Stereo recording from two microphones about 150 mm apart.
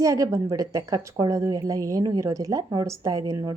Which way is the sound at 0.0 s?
20° right (ahead or behind).